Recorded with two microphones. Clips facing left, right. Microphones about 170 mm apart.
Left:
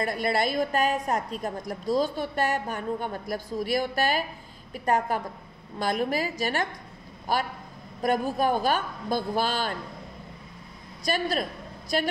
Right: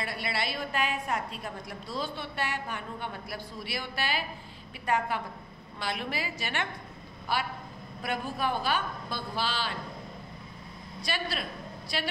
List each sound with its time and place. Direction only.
0.0 s a woman's voice: 45° left (ahead or behind)
11.1 s a woman's voice: 45° left (ahead or behind)